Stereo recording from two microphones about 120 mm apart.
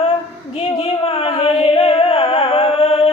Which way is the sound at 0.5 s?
55° left (ahead or behind).